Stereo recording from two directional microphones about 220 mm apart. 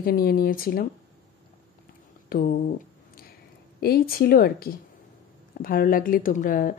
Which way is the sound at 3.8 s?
45° left (ahead or behind).